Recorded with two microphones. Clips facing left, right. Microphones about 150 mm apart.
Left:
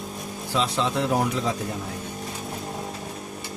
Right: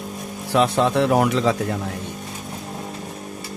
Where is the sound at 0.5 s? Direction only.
60° right (ahead or behind); by 1.5 s 85° right.